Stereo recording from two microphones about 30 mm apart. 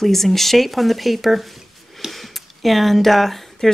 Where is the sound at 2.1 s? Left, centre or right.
Centre.